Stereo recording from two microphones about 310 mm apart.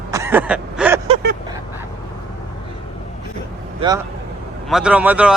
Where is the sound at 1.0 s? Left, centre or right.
Right.